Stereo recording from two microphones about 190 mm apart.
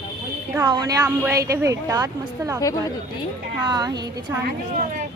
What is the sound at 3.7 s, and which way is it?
Speech, 20° right (ahead or behind).